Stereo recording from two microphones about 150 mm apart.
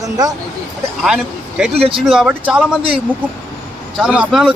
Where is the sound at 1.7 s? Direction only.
40° right (ahead or behind).